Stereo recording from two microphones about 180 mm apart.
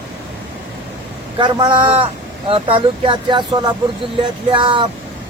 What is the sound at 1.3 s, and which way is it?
Speech, 25° right (ahead or behind).